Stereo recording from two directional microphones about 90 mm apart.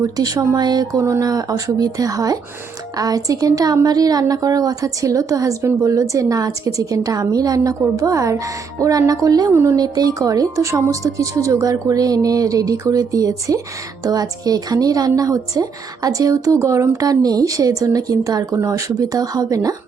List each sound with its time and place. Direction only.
0.0 s speech: 45° right (ahead or behind)
0.9 s speech: 35° right (ahead or behind)
2.9 s music: 45° right (ahead or behind)
8.8 s speech: 40° right (ahead or behind)
9.5 s speech: 25° right (ahead or behind)
9.7 s music: 45° right (ahead or behind)
14.0 s speech: 45° right (ahead or behind)